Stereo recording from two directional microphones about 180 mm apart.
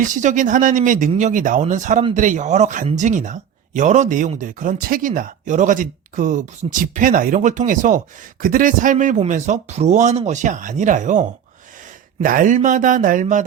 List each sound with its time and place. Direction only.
0.0 s speech: 45° right (ahead or behind)